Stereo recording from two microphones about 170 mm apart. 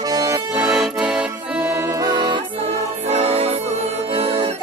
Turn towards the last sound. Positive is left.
turn(degrees=-35)  # may be behind; listen again after turning